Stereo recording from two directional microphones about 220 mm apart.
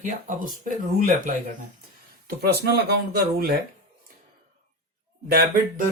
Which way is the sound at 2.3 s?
45° right (ahead or behind).